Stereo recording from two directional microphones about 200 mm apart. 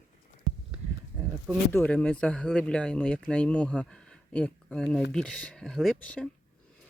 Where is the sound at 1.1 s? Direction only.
10° right (ahead or behind).